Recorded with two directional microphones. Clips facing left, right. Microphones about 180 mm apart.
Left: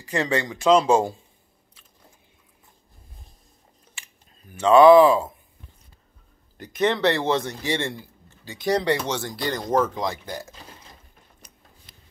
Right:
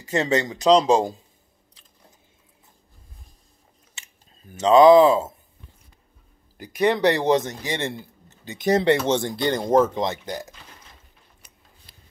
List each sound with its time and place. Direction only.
0.0 s speech: 20° right (ahead or behind)
0.7 s speech: 35° right (ahead or behind)
3.9 s a sound: 20° right (ahead or behind)
6.6 s speech: 10° right (ahead or behind)